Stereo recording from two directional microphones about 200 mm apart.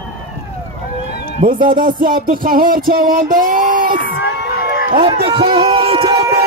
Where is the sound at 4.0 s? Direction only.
55° left (ahead or behind).